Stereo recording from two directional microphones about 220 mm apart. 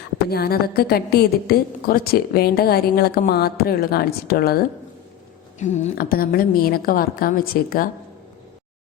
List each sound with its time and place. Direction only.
0.3 s a woman's voice: 45° left (ahead or behind)